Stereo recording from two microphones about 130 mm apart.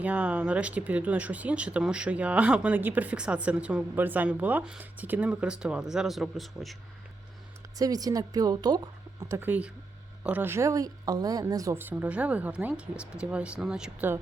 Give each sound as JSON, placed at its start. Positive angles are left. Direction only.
{"t": 0.0, "sound": "speech", "side_deg": -10}
{"t": 7.8, "sound": "speech", "side_deg": -30}
{"t": 9.3, "sound": "speech", "side_deg": -15}
{"t": 11.8, "sound": "speech", "side_deg": -15}